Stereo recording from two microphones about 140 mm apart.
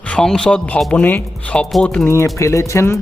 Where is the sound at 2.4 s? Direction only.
20° left (ahead or behind).